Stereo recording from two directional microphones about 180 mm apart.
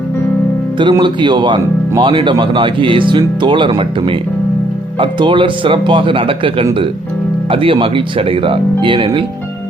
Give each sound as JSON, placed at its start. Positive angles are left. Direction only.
{"t": 0.8, "sound": "speech", "side_deg": -25}